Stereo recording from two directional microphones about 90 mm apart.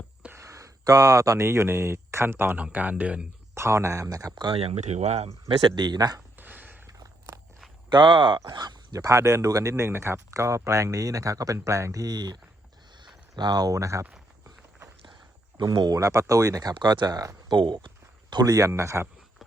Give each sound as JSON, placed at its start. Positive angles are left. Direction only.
{"t": 0.3, "sound": "a sound", "side_deg": -35}
{"t": 1.5, "sound": "speech", "side_deg": -25}
{"t": 2.6, "sound": "speech", "side_deg": -15}
{"t": 3.5, "sound": "speech", "side_deg": -30}
{"t": 5.6, "sound": "speech", "side_deg": -55}
{"t": 6.1, "sound": "a sound", "side_deg": -20}
{"t": 6.8, "sound": "biting", "side_deg": -40}
{"t": 7.9, "sound": "speech", "side_deg": -60}
{"t": 8.5, "sound": "speech", "side_deg": -50}
{"t": 15.0, "sound": "a sound", "side_deg": -60}
{"t": 15.6, "sound": "speech", "side_deg": -45}
{"t": 16.7, "sound": "speech", "side_deg": -55}
{"t": 17.5, "sound": "a sound", "side_deg": -60}
{"t": 18.7, "sound": "speech", "side_deg": -30}